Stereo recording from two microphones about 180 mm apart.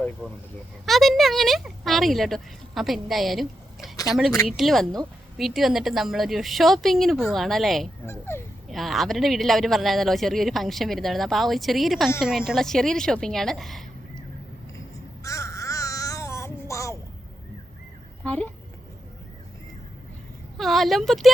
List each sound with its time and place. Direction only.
0.2 s speech: 5° right (ahead or behind)
8.0 s speech: 15° left (ahead or behind)
8.7 s speech: centre (ahead or behind)
15.2 s babbling: 15° left (ahead or behind)
18.2 s speech: 10° left (ahead or behind)
20.6 s speech: centre (ahead or behind)